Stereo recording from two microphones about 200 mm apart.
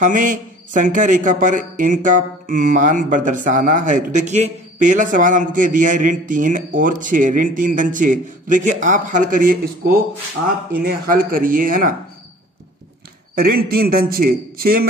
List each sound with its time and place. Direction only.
0.0 s a man's voice: 40° right (ahead or behind)
13.3 s a man's voice: 50° right (ahead or behind)